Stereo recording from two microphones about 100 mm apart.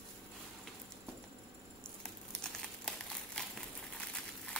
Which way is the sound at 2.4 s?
5° left (ahead or behind).